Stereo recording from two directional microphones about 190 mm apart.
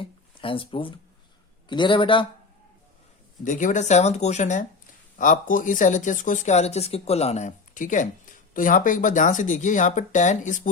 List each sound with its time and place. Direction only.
0.0 s a sound: 25° left (ahead or behind)
1.7 s a man's voice: 25° left (ahead or behind)
3.4 s speech: 40° left (ahead or behind)